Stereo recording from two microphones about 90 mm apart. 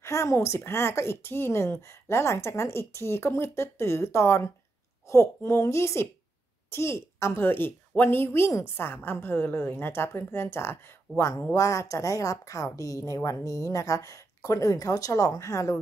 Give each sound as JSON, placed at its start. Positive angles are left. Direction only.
{"t": 0.0, "sound": "a woman's voice", "side_deg": 35}